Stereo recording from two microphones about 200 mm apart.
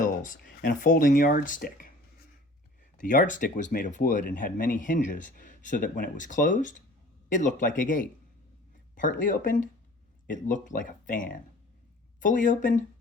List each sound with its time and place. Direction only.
0.0 s speech: 40° left (ahead or behind)
3.0 s speech: 40° left (ahead or behind)